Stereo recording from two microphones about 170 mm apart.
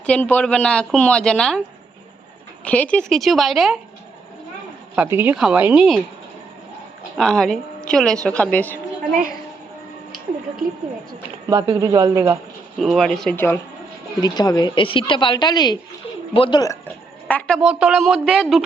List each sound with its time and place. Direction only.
0.0 s a woman's voice: 10° left (ahead or behind)
2.6 s a woman's voice: 10° left (ahead or behind)
5.1 s a woman's voice: 10° right (ahead or behind)
7.2 s a woman's voice: 5° left (ahead or behind)
11.4 s a man's voice: 25° right (ahead or behind)
12.7 s a woman's voice: centre (ahead or behind)
13.3 s a woman's voice: 15° left (ahead or behind)
17.2 s a woman's voice: 5° left (ahead or behind)